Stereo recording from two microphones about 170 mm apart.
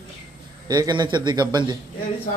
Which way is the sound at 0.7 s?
25° right (ahead or behind).